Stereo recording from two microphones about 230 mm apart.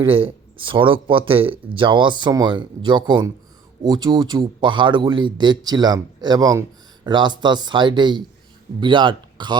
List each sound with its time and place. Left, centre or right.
0.0 s speech: right